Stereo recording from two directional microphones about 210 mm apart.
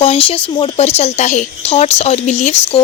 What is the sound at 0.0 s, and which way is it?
A woman's voice, 25° left (ahead or behind).